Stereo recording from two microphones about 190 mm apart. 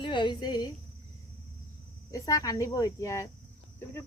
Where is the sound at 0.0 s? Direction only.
25° left (ahead or behind).